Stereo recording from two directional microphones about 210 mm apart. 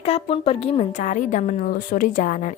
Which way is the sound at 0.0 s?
30° left (ahead or behind).